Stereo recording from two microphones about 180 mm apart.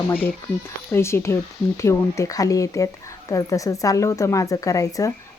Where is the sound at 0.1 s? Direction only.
10° left (ahead or behind).